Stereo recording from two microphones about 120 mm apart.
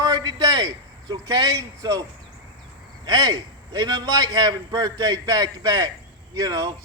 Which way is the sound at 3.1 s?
35° right (ahead or behind).